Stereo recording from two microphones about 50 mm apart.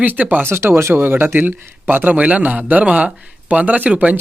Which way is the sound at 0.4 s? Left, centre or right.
Right.